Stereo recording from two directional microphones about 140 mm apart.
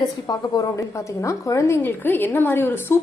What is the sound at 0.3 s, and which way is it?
A woman's voice, 25° left (ahead or behind).